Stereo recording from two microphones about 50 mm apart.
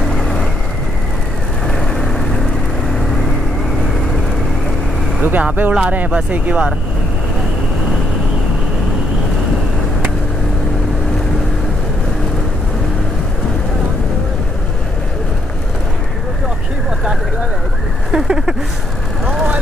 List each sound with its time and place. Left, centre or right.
0.2 s vehicle: centre
1.7 s vehicle: centre
5.2 s speech: right
18.1 s a sound: centre